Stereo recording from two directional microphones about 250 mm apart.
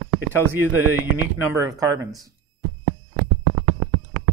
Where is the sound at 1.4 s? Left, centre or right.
Centre.